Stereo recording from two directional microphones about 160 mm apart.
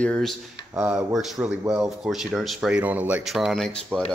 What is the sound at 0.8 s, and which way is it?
Speech, 10° right (ahead or behind).